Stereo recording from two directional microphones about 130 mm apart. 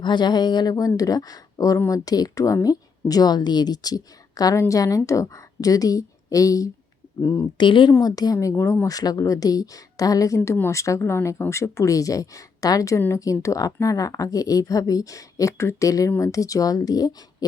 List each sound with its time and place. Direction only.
0.0 s a woman's voice: 35° left (ahead or behind)
7.6 s a woman's voice: 35° left (ahead or behind)